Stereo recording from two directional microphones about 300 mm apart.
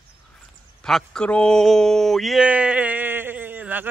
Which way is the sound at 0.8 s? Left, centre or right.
Centre.